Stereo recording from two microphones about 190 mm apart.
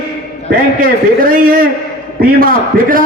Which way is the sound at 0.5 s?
50° right (ahead or behind).